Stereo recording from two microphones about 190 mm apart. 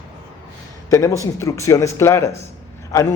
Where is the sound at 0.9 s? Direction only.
15° left (ahead or behind).